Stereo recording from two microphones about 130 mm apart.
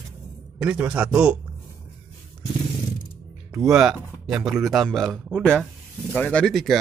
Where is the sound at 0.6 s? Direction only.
10° right (ahead or behind).